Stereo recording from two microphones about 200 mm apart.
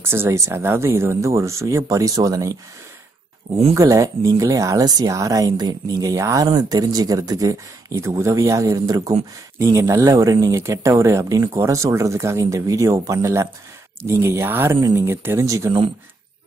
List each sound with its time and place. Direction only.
0.0 s speech: 10° right (ahead or behind)
3.7 s speech: 15° right (ahead or behind)